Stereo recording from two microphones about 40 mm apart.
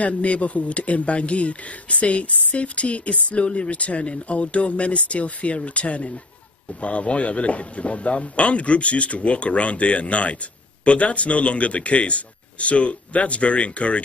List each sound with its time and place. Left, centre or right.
0.0 s speech: left